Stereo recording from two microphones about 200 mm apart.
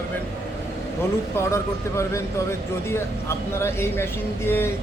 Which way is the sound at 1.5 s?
15° left (ahead or behind).